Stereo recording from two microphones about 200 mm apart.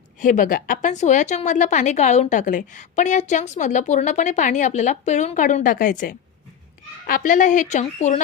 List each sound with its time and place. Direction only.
0.2 s a woman's voice: 40° left (ahead or behind)